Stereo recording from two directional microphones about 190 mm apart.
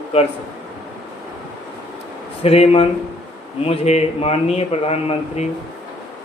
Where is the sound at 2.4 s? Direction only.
30° left (ahead or behind).